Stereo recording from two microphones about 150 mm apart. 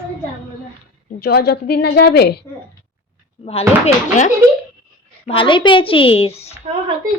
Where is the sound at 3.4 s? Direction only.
45° left (ahead or behind).